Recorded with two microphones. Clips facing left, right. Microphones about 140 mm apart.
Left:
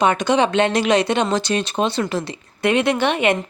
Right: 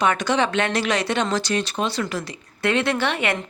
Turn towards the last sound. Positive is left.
turn(degrees=20)  # may be behind; listen again after turning